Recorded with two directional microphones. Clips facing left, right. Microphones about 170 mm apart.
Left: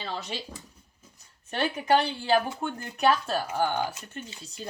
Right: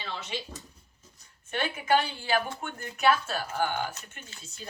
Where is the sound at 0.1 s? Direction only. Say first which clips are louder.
Left 3 dB; 40° left (ahead or behind).